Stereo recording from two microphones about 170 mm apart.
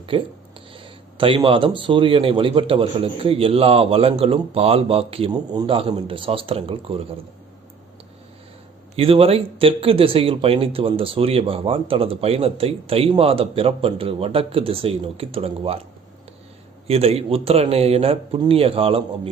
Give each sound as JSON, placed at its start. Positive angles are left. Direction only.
{"t": 0.1, "sound": "speech", "side_deg": -30}
{"t": 9.0, "sound": "speech", "side_deg": -35}
{"t": 16.8, "sound": "speech", "side_deg": -35}